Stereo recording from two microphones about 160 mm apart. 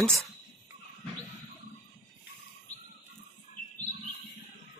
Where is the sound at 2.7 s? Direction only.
45° left (ahead or behind).